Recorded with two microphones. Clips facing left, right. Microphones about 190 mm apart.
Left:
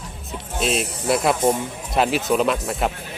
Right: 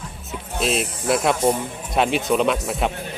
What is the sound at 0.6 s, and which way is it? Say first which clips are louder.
Speech: even; centre (ahead or behind).